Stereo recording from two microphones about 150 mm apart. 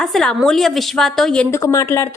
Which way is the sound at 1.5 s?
20° left (ahead or behind).